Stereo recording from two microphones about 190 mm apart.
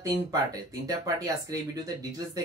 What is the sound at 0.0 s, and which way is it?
Speech, 20° right (ahead or behind).